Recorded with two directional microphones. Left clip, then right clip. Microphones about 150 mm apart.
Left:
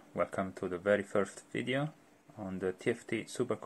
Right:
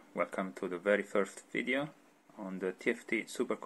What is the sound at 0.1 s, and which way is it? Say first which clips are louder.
Speech: left 1 dB; 5° right (ahead or behind).